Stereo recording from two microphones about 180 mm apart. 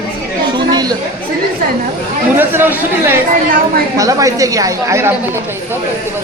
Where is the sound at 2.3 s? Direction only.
10° right (ahead or behind).